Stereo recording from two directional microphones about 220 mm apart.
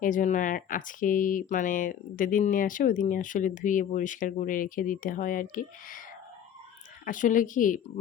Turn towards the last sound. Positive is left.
turn(degrees=35)  # may be behind; listen again after turning